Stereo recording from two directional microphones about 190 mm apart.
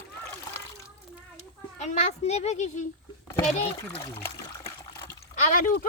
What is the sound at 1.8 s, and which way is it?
Speech, 40° left (ahead or behind).